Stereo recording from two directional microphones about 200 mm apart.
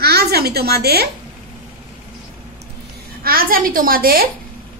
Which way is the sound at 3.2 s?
45° right (ahead or behind).